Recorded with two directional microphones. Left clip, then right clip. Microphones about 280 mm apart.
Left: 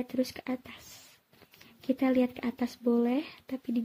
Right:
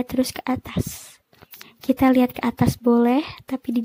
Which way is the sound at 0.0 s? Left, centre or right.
Right.